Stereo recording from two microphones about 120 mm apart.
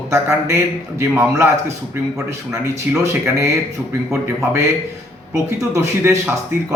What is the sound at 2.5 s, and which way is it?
A man's voice, 25° right (ahead or behind).